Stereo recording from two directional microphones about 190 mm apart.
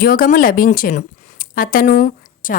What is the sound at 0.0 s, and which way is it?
Speech, 50° left (ahead or behind).